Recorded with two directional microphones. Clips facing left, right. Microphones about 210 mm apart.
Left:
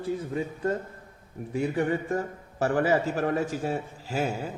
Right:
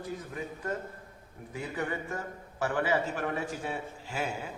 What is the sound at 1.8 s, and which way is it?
A man's voice, 35° left (ahead or behind).